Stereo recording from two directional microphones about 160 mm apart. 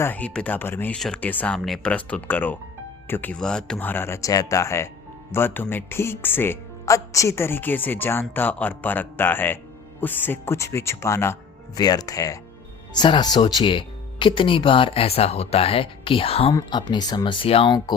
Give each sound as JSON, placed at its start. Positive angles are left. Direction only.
{"t": 0.0, "sound": "speech", "side_deg": 10}